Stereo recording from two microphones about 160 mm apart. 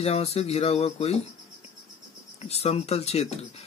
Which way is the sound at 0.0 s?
40° left (ahead or behind).